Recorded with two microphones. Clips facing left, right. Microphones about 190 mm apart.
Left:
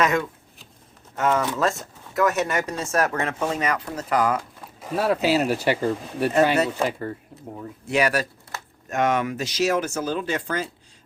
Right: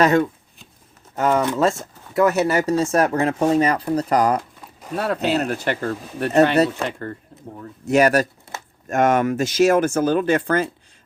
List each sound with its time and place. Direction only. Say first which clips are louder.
0.0 s speech: right 6 dB; 35° right (ahead or behind)
4.8 s speech: left 1 dB; 5° left (ahead or behind)
7.9 s speech: right 6 dB; 45° right (ahead or behind)
8.5 s a sound: right 2 dB; 20° right (ahead or behind)
8.9 s speech: right 5 dB; 50° right (ahead or behind)